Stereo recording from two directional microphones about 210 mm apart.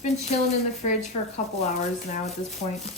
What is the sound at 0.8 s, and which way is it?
Speech, 30° left (ahead or behind).